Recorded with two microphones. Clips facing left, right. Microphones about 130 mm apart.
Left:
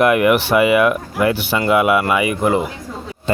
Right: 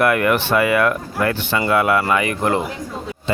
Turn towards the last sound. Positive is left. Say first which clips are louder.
# left 3 dB
turn(degrees=45)  # may be behind; listen again after turning